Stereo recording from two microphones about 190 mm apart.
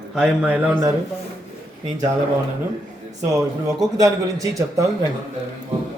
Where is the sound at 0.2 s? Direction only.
5° right (ahead or behind).